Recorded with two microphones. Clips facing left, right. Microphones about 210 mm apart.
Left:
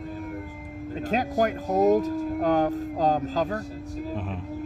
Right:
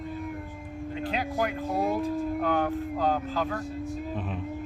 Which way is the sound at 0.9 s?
45° left (ahead or behind).